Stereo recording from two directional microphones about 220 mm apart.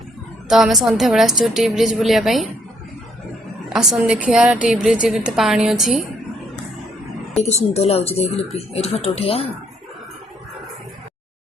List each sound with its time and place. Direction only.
0.4 s a woman's voice: centre (ahead or behind)
3.7 s a woman's voice: centre (ahead or behind)
7.5 s speech: 30° left (ahead or behind)